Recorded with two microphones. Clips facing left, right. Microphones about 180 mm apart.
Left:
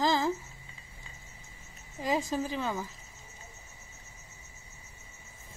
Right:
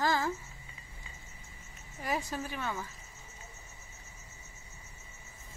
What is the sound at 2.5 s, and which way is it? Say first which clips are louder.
Speech: left 4 dB; 25° left (ahead or behind).